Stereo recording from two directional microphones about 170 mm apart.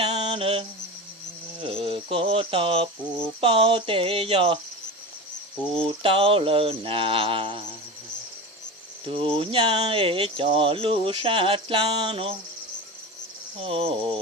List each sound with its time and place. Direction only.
0.2 s mantra: 30° right (ahead or behind)
1.5 s a sound: 30° right (ahead or behind)
3.4 s speech: 30° right (ahead or behind)
5.7 s speech: 30° right (ahead or behind)
9.0 s speech: 35° right (ahead or behind)
13.6 s speech: 35° right (ahead or behind)